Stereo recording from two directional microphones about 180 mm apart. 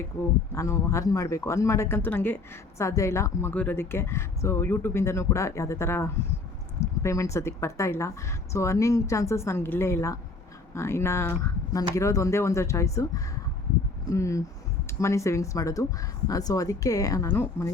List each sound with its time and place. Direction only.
0.5 s speech: 15° left (ahead or behind)